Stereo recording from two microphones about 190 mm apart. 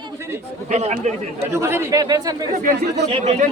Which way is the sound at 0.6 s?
35° right (ahead or behind).